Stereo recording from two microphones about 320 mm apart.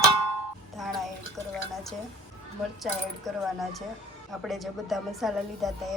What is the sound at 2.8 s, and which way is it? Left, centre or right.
A woman's voice, centre.